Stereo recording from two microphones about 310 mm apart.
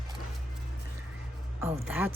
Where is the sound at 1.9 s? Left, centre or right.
Centre.